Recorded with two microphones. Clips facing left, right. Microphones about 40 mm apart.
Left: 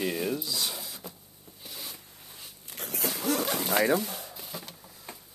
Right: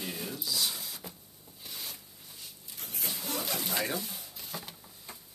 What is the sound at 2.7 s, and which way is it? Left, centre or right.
Zipper, left.